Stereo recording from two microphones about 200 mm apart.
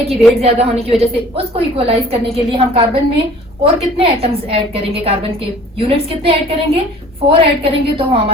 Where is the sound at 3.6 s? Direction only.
25° right (ahead or behind).